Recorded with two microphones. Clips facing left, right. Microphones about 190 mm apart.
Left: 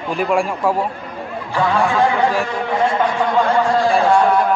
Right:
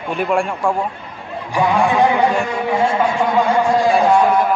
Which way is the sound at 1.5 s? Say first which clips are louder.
Right 2 dB; 15° right (ahead or behind).